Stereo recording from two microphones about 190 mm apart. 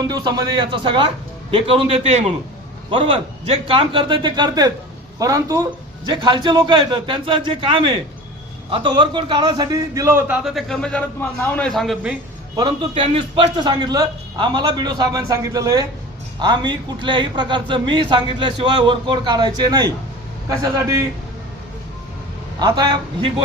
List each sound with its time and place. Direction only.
0.0 s a man's voice: 20° right (ahead or behind); by 12.1 s centre (ahead or behind)
12.5 s speech: 25° right (ahead or behind)
22.5 s speech: 20° right (ahead or behind)